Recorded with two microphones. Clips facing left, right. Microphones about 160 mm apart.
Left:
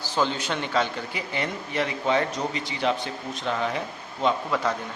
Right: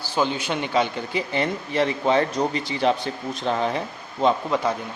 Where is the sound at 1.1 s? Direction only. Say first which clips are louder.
Right 5 dB; 30° right (ahead or behind).